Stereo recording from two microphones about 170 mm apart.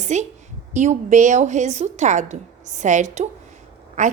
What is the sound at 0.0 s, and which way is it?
A woman's voice, 45° right (ahead or behind).